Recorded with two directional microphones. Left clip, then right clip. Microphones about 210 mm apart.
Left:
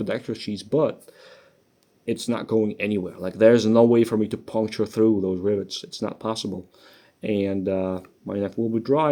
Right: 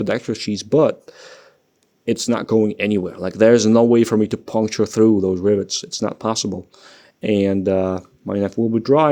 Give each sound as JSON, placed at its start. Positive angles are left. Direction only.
{"t": 0.0, "sound": "speech", "side_deg": -40}